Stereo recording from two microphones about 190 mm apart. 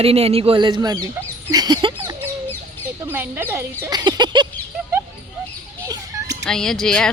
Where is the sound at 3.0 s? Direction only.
10° right (ahead or behind).